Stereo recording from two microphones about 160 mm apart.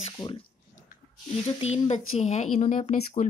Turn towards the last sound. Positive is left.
turn(degrees=45)  # may be behind; listen again after turning